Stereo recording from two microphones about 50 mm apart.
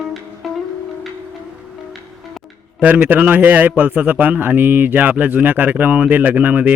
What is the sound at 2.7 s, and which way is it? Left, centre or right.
A man's voice, right.